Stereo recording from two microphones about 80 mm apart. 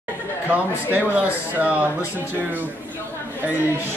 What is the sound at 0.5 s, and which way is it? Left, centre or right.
A man's voice, right.